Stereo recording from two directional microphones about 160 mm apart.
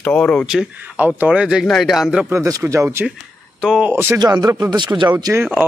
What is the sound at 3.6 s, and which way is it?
Speech, 5° right (ahead or behind).